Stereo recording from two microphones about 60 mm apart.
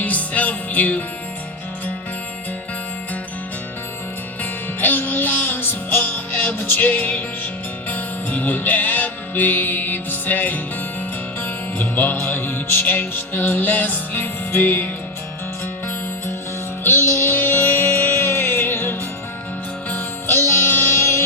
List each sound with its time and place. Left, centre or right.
0.0 s music: left
4.8 s music: left
16.8 s music: left